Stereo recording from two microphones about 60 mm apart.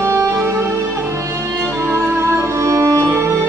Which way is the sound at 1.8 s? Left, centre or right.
Right.